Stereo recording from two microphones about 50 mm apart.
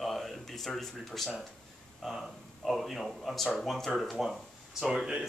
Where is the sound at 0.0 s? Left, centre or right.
Centre.